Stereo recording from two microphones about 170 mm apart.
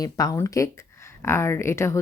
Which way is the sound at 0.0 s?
20° left (ahead or behind).